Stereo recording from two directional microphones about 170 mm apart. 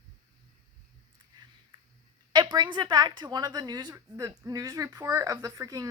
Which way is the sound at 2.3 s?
25° right (ahead or behind).